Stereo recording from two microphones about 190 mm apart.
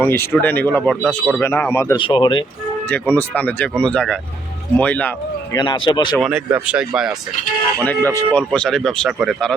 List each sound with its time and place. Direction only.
0.0 s speech: 10° left (ahead or behind)
2.9 s speech: 10° left (ahead or behind)
5.5 s speech: 25° left (ahead or behind)
6.1 s speech: 5° right (ahead or behind)
7.8 s speech: 10° left (ahead or behind)